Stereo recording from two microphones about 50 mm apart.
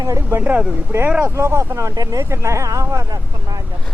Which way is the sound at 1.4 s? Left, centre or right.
Right.